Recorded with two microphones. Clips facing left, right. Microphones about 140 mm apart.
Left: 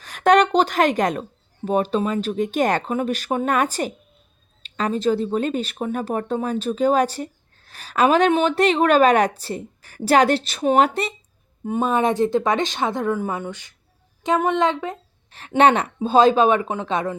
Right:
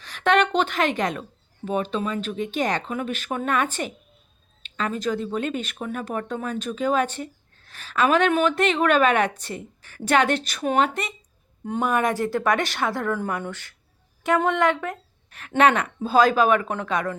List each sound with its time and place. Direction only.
0.0 s a woman's voice: 45° left (ahead or behind)
2.9 s speech: 35° left (ahead or behind)
11.9 s a woman's voice: 25° left (ahead or behind)